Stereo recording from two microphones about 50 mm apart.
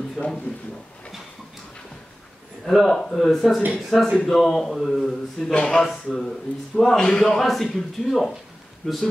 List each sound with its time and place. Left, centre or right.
0.2 s a man's voice: right
2.6 s a man's voice: centre
5.4 s a man's voice: centre
8.8 s a man's voice: centre